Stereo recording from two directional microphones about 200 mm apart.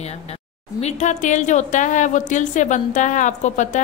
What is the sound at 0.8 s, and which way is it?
A woman's voice, 35° left (ahead or behind).